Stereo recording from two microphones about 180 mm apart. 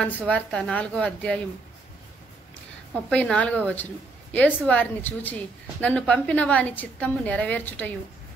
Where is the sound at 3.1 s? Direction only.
5° left (ahead or behind).